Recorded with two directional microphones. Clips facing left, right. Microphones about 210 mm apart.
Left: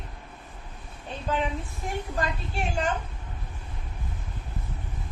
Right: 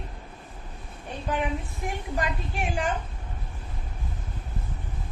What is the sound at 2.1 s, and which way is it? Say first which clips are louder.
Speech: right 2 dB; 15° right (ahead or behind).